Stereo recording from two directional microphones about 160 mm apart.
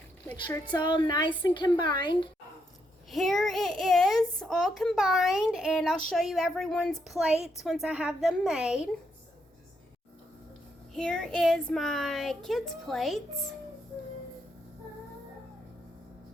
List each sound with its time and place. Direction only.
0.7 s speech: 30° left (ahead or behind)
3.1 s a child's voice: centre (ahead or behind)
10.9 s a child's voice: 5° left (ahead or behind)